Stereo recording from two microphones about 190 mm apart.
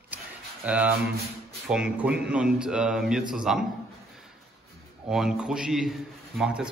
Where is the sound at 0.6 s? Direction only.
5° right (ahead or behind).